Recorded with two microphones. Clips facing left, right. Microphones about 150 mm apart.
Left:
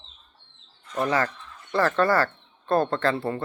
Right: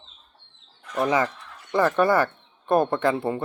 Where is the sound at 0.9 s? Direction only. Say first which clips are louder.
Right 2 dB; 15° right (ahead or behind).